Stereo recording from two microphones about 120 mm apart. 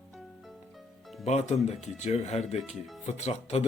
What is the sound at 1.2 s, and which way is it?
Speech, 65° left (ahead or behind).